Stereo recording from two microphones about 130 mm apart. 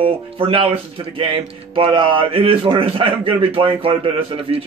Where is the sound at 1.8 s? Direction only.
40° right (ahead or behind).